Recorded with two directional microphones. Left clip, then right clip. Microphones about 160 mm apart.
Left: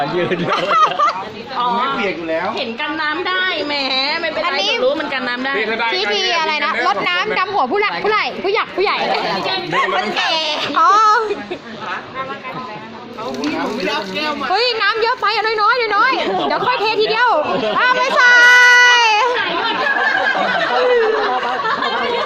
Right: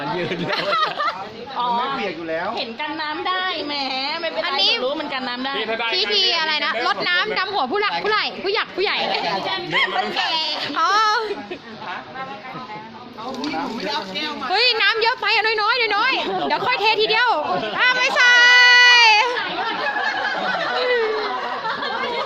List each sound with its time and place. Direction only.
0.5 s a woman's voice: 5° right (ahead or behind)
3.0 s a woman's voice: 25° right (ahead or behind)
14.5 s speech: 25° right (ahead or behind)
18.0 s baby cry: 20° right (ahead or behind)
20.7 s snicker: 15° right (ahead or behind)